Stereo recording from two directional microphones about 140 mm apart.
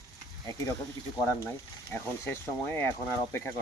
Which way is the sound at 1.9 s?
15° left (ahead or behind).